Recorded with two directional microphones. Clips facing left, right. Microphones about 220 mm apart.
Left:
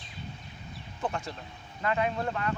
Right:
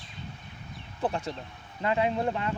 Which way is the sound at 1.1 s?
30° right (ahead or behind).